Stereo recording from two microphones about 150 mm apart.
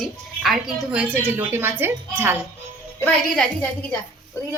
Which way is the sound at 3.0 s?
5° left (ahead or behind).